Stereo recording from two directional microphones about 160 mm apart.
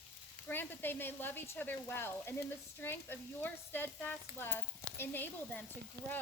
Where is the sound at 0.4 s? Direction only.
10° left (ahead or behind).